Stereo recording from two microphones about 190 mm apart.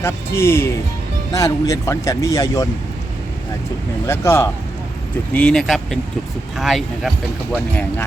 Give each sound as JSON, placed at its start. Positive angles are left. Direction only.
{"t": 0.0, "sound": "speech", "side_deg": 15}
{"t": 4.0, "sound": "speech", "side_deg": 15}